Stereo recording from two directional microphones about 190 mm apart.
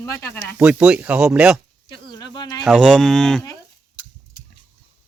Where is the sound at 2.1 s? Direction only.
20° left (ahead or behind).